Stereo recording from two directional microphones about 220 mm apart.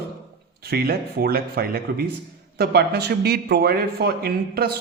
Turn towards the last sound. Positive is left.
turn(degrees=-45)  # may be behind; listen again after turning